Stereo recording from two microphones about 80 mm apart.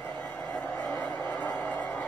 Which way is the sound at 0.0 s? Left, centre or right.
Centre.